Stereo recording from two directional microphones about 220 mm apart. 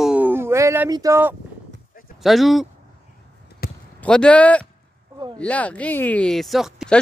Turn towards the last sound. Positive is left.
turn(degrees=0)  # may be behind; listen again after turning